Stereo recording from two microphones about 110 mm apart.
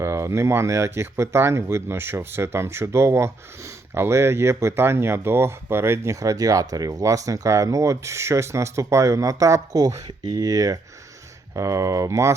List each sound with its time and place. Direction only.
0.0 s speech: 25° right (ahead or behind)